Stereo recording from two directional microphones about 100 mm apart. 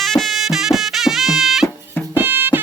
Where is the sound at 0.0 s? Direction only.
5° left (ahead or behind).